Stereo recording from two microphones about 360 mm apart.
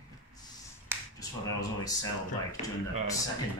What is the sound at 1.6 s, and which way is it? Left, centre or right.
Speech, centre.